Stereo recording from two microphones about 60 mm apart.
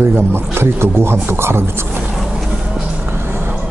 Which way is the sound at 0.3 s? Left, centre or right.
Right.